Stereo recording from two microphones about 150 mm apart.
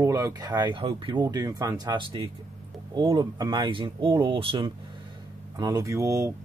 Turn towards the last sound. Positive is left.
turn(degrees=-20)  # may be behind; listen again after turning